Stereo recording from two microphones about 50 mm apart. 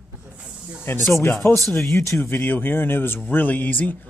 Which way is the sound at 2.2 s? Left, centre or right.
Left.